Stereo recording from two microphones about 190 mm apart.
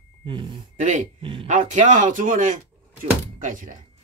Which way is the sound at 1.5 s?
40° right (ahead or behind).